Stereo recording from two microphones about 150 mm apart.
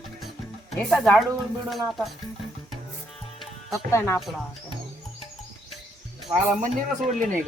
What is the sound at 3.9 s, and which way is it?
Speech, 15° left (ahead or behind).